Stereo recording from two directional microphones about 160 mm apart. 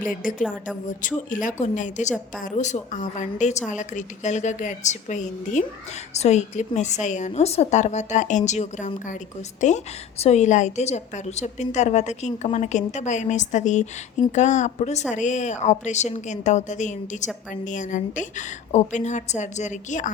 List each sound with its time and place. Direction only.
0.1 s a woman's voice: 55° left (ahead or behind)